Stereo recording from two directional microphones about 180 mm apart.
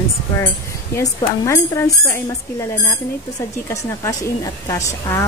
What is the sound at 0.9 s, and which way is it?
Speech, 15° left (ahead or behind).